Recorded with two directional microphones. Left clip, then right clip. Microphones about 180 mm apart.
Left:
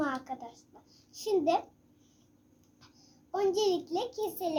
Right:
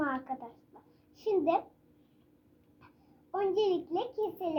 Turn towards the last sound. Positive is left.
turn(degrees=10)  # may be behind; listen again after turning